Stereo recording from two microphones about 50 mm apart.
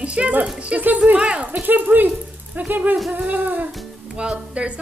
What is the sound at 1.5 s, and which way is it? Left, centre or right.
Speech, right.